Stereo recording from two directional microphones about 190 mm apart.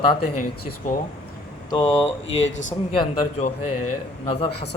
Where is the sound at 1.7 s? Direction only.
20° left (ahead or behind).